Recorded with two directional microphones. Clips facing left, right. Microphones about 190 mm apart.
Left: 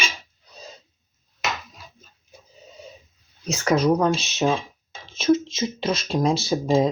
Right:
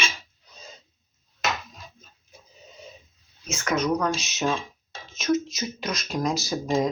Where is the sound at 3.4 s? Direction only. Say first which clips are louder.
Left 5 dB; 35° left (ahead or behind).